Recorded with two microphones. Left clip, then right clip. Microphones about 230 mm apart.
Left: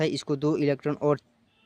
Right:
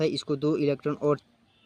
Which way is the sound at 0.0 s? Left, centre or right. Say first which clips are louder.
Even; left.